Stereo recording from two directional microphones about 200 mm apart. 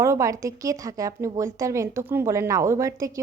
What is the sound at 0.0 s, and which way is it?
A woman's voice, 15° right (ahead or behind).